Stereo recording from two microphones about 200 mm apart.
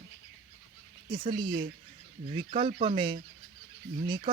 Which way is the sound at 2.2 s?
25° right (ahead or behind).